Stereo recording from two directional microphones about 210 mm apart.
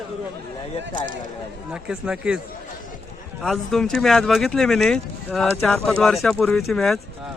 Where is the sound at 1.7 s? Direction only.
5° right (ahead or behind).